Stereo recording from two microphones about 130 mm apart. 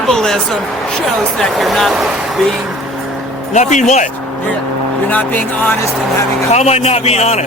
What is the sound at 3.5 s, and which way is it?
Speech, 65° left (ahead or behind).